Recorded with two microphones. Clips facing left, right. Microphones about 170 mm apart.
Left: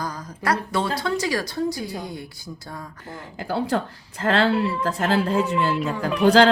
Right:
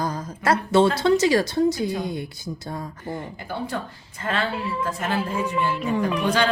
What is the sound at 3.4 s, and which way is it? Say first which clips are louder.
A woman's voice: left 5 dB; 90° left.